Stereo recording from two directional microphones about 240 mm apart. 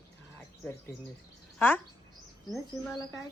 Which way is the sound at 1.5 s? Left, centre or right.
Centre.